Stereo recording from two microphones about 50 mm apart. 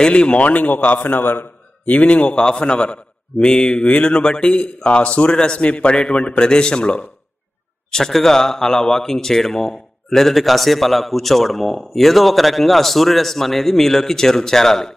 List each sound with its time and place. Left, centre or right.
0.0 s a man's voice: left
1.9 s a man's voice: left
7.9 s a man's voice: centre